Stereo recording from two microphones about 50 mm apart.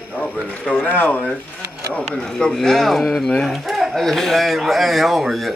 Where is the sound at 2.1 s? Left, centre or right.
Centre.